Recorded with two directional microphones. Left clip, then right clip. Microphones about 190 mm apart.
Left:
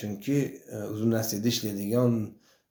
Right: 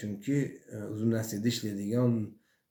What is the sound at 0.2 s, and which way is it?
Speech, 15° right (ahead or behind).